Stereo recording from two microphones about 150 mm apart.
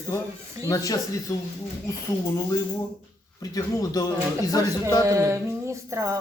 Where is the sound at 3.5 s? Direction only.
25° left (ahead or behind).